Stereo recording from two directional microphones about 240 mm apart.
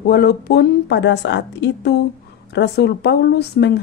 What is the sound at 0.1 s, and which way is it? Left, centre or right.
A woman's voice, left.